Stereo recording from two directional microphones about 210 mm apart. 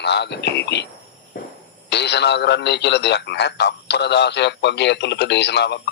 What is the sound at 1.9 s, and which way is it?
A man's voice, 55° left (ahead or behind).